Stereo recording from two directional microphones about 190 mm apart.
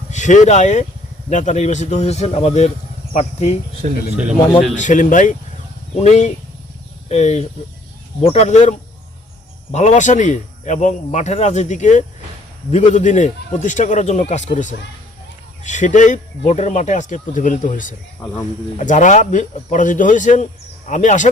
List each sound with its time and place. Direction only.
0.1 s speech: 40° left (ahead or behind)
4.7 s speech: 40° left (ahead or behind)
9.7 s speech: 40° left (ahead or behind)